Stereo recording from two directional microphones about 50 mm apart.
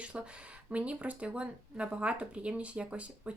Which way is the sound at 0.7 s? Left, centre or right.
Right.